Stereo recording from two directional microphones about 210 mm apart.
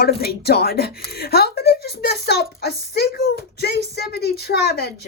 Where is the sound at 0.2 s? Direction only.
50° left (ahead or behind).